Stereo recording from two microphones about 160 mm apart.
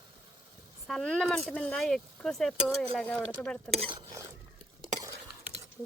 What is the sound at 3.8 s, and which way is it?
Speech, 30° right (ahead or behind).